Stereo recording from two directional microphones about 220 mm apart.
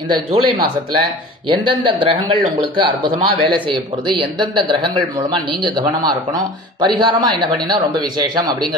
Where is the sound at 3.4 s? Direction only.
20° right (ahead or behind).